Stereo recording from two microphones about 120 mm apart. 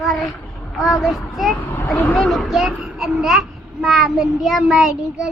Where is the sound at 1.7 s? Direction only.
15° left (ahead or behind).